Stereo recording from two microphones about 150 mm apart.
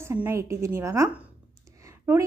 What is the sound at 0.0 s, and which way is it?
A woman's voice, 20° right (ahead or behind).